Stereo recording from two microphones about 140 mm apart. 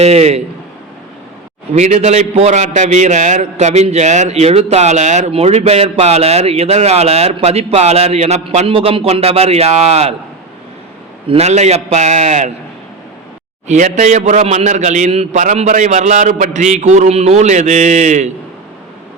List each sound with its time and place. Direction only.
0.0 s a man's voice: 50° right (ahead or behind)
1.7 s a man's voice: 55° right (ahead or behind)
11.3 s a man's voice: 50° right (ahead or behind)
13.7 s a man's voice: 60° right (ahead or behind)